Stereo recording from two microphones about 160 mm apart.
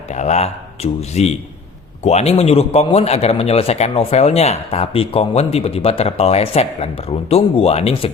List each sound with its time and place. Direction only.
0.1 s speech: 45° left (ahead or behind)